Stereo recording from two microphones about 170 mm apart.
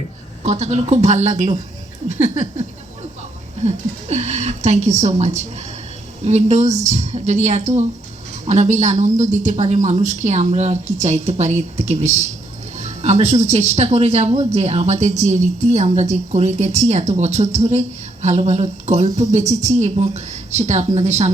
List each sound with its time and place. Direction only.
0.4 s a woman's voice: 40° right (ahead or behind)
3.6 s a woman's voice: 40° right (ahead or behind)